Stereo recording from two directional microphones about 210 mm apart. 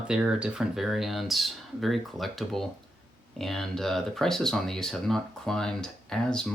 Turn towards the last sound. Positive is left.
turn(degrees=5)  # may be behind; listen again after turning